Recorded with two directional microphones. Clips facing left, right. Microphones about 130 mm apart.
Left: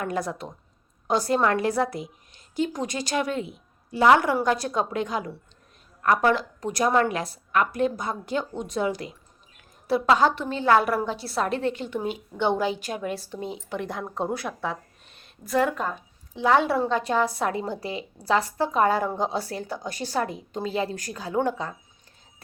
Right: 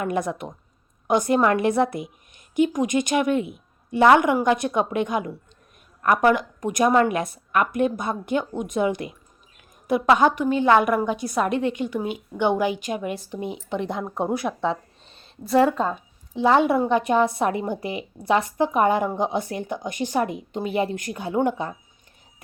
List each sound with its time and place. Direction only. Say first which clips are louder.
0.0 s a woman's voice: right 3 dB; 20° right (ahead or behind)
16.0 s a woman's voice: right 5 dB; 20° right (ahead or behind)